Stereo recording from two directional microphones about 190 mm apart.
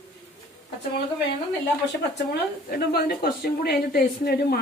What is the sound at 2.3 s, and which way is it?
A woman's voice, 55° left (ahead or behind).